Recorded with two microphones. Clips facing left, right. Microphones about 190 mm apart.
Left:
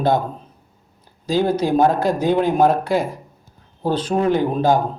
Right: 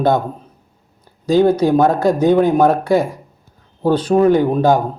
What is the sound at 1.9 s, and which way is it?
Speech, 45° right (ahead or behind).